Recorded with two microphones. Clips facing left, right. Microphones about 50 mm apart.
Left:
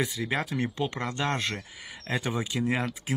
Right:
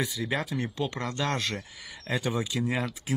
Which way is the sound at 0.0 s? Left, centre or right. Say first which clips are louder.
Left 1 dB; left.